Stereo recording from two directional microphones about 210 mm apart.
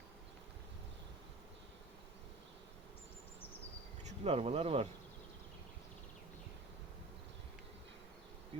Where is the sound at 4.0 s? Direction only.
30° right (ahead or behind).